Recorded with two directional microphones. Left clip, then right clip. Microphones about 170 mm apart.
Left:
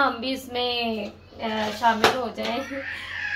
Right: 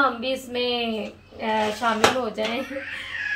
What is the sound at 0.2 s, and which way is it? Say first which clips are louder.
Speech: right 2 dB; 25° right (ahead or behind).